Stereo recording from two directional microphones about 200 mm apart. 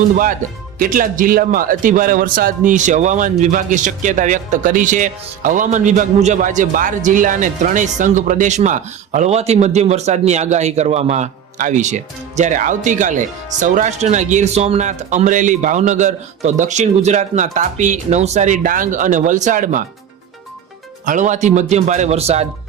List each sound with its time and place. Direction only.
0.8 s a man's voice: 45° right (ahead or behind)
21.0 s a man's voice: 40° right (ahead or behind)